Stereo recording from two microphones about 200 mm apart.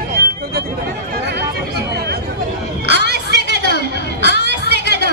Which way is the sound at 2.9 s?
55° right (ahead or behind).